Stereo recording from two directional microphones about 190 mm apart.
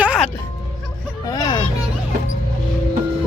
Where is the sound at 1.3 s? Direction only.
20° left (ahead or behind).